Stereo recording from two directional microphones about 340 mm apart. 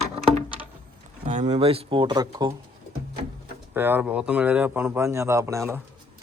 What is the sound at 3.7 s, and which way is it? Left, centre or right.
Speech, centre.